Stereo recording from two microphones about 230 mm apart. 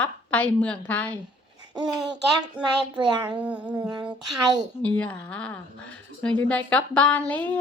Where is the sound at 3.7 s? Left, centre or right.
Centre.